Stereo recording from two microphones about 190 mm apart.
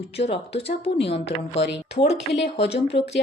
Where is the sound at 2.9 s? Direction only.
25° left (ahead or behind).